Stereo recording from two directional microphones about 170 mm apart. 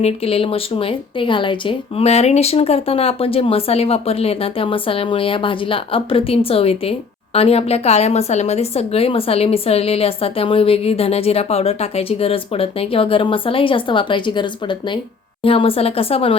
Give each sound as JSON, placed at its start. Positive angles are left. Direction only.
{"t": 0.0, "sound": "a woman's voice", "side_deg": 35}